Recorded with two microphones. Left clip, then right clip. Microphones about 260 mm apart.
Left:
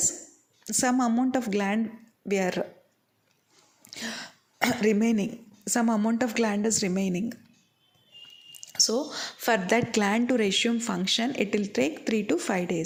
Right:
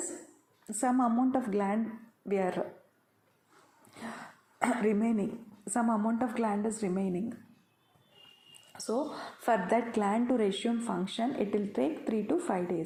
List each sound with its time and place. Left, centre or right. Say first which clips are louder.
0.6 s a woman's voice: left 4 dB; left
3.8 s speech: left 7 dB; left
8.7 s a woman's voice: left 8 dB; left